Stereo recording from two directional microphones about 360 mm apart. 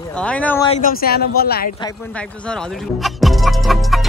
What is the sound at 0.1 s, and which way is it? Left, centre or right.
Speech, centre.